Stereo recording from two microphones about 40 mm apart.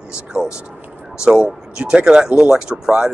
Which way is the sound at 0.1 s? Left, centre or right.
Centre.